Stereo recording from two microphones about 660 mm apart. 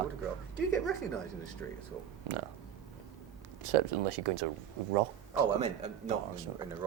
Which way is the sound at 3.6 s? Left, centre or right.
Right.